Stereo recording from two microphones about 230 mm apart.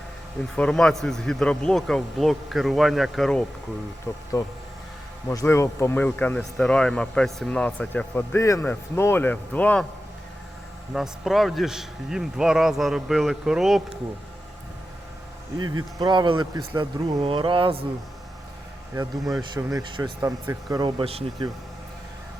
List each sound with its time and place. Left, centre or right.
0.5 s speech: centre
5.3 s speech: centre
10.9 s speech: centre
15.5 s speech: centre
19.3 s speech: centre